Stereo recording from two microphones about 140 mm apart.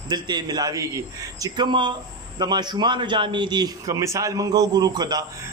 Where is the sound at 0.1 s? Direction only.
30° right (ahead or behind).